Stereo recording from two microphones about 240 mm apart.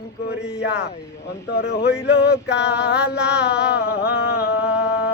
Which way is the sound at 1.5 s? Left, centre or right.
Left.